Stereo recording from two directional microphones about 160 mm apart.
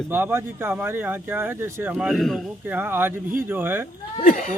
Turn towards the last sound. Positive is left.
turn(degrees=55)  # may be behind; listen again after turning